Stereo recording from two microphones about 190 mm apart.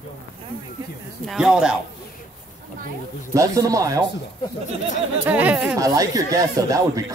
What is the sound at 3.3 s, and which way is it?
Speech, 15° right (ahead or behind).